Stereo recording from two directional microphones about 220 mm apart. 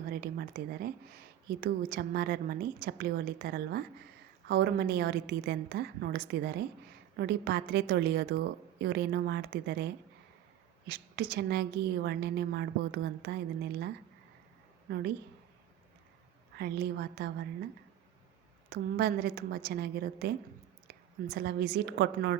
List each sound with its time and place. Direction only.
0.1 s a woman's voice: 45° right (ahead or behind)
16.6 s a woman's voice: 50° right (ahead or behind)
18.7 s a woman's voice: 45° right (ahead or behind)